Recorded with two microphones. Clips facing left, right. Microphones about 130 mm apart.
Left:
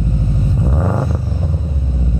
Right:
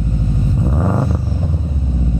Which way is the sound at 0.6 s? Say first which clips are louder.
Right 2 dB; 5° right (ahead or behind).